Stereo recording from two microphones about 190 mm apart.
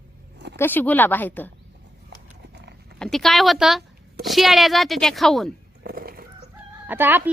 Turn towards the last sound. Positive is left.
turn(degrees=-10)  # may be behind; listen again after turning